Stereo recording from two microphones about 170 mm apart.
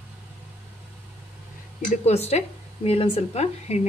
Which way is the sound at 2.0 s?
40° left (ahead or behind).